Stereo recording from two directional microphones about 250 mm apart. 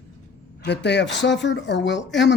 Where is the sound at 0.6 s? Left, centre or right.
Left.